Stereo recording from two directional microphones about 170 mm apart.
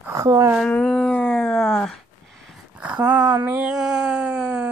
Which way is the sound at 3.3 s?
10° right (ahead or behind).